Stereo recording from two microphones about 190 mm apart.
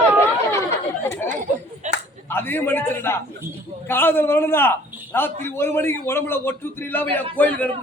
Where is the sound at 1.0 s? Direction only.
15° left (ahead or behind).